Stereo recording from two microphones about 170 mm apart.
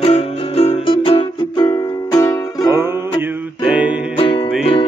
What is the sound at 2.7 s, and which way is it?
Music, 15° right (ahead or behind).